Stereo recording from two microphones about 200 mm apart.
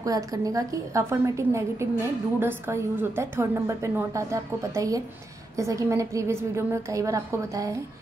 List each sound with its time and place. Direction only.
0.0 s a woman's voice: 15° right (ahead or behind)